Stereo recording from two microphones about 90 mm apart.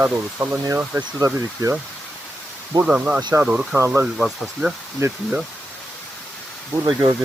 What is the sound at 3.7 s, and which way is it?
Speech, 25° right (ahead or behind).